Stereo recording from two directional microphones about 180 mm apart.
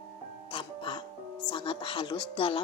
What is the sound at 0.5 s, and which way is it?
Music, 30° left (ahead or behind).